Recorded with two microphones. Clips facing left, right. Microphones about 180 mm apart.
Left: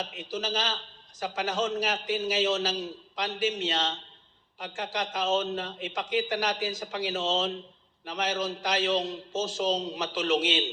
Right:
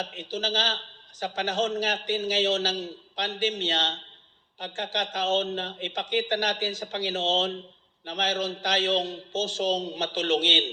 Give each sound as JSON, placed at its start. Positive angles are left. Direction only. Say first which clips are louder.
{"t": 0.0, "sound": "a man's voice", "louder": "right 2 dB", "side_deg": -30}